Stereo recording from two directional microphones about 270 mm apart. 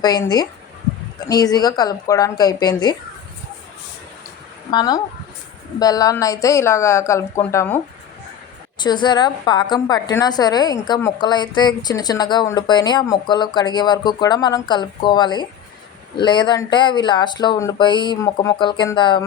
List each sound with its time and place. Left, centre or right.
0.0 s a woman's voice: centre
4.7 s a woman's voice: centre
8.8 s a woman's voice: centre